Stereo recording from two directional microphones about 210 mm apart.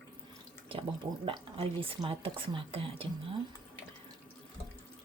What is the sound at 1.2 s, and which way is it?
Speech, 25° right (ahead or behind).